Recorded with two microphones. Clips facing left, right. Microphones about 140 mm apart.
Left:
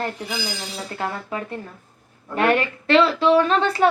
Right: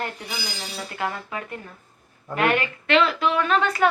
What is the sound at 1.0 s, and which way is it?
A woman's voice, 35° left (ahead or behind).